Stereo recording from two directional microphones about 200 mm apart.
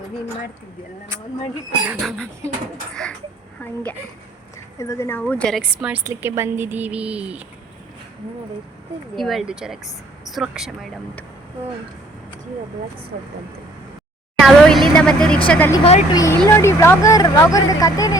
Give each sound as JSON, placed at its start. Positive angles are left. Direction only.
{"t": 1.9, "sound": "speech", "side_deg": 0}
{"t": 4.8, "sound": "a woman's voice", "side_deg": 15}
{"t": 9.1, "sound": "speech", "side_deg": 0}
{"t": 14.3, "sound": "a sound", "side_deg": 0}
{"t": 15.4, "sound": "speech", "side_deg": 5}
{"t": 15.8, "sound": "speech", "side_deg": 30}
{"t": 16.1, "sound": "speech", "side_deg": 15}